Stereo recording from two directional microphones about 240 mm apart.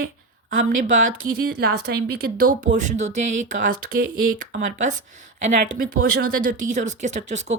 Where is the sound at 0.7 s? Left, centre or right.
Right.